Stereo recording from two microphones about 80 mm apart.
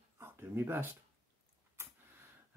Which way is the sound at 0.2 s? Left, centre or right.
Right.